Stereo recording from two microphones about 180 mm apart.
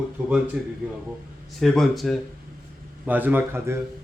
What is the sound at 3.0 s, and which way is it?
Speech, 10° right (ahead or behind).